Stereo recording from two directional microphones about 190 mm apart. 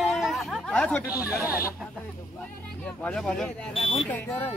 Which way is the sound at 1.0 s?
10° right (ahead or behind).